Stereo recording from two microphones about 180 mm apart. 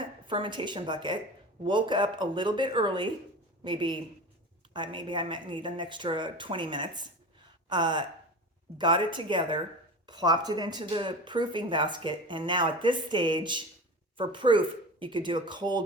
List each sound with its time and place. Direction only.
0.3 s speech: 25° right (ahead or behind)